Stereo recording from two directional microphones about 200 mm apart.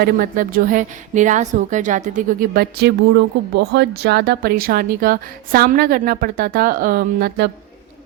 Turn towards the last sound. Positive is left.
turn(degrees=-50)  # may be behind; listen again after turning